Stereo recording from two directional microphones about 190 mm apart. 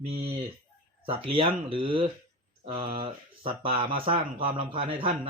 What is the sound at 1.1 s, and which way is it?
Speech, 30° right (ahead or behind).